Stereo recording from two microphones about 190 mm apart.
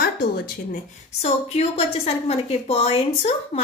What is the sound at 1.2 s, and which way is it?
A woman's voice, 30° left (ahead or behind).